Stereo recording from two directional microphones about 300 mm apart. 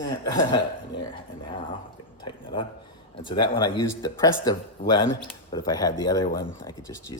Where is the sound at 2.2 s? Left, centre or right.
Centre.